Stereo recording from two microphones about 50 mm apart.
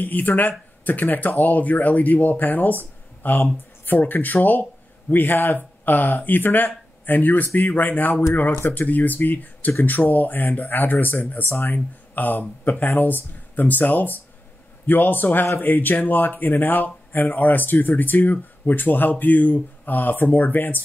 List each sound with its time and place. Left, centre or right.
0.0 s speech: left